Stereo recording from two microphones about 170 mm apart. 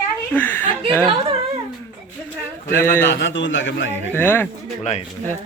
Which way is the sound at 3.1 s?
90° left.